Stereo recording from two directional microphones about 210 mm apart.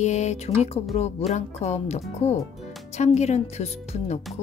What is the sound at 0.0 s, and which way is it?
Speech, 35° left (ahead or behind).